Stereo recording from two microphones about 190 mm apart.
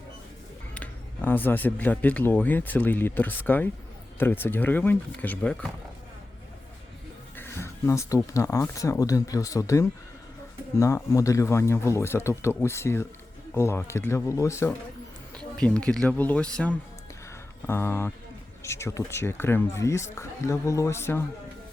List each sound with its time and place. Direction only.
0.7 s speech: 10° left (ahead or behind)
7.3 s speech: 10° left (ahead or behind)